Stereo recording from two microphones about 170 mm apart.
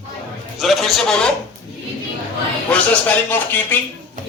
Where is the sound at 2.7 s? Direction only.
10° left (ahead or behind).